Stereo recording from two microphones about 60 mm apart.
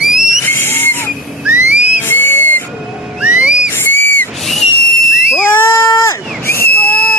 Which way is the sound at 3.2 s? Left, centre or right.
Right.